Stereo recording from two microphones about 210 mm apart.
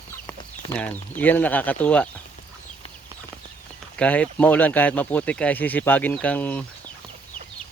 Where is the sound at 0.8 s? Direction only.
10° left (ahead or behind).